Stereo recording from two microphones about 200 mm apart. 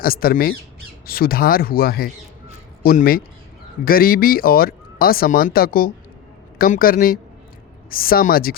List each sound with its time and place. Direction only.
0.0 s speech: 45° left (ahead or behind)